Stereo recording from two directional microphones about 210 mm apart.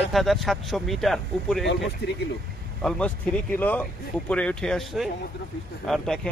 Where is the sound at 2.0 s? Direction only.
55° left (ahead or behind).